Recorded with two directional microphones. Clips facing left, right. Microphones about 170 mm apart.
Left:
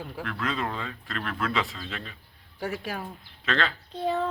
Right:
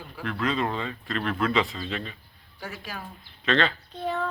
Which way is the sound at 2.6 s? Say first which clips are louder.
Left 6 dB; 60° left (ahead or behind).